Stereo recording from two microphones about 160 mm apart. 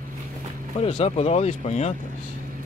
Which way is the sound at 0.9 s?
40° left (ahead or behind).